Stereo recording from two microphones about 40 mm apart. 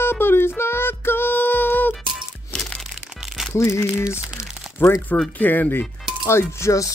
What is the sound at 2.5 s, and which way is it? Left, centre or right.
Music, left.